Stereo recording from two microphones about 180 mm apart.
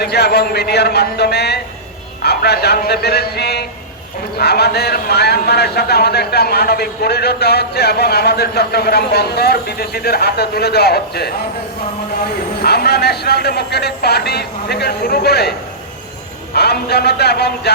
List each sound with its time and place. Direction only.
0.0 s speech: 65° left (ahead or behind)
12.6 s speech: 65° left (ahead or behind)
16.6 s speech: 65° left (ahead or behind)